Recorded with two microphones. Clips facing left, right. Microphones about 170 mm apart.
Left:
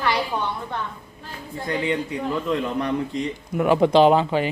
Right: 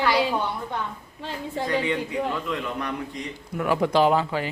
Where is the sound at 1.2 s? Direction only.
80° right.